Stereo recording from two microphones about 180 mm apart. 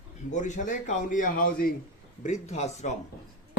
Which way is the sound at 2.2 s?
40° left (ahead or behind).